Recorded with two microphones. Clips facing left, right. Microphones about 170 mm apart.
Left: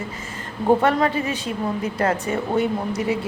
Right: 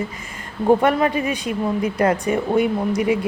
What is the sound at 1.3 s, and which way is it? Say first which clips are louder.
Speech: right 3 dB; 15° right (ahead or behind).